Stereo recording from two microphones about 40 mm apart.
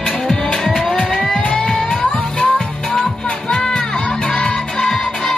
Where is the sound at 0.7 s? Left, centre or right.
Centre.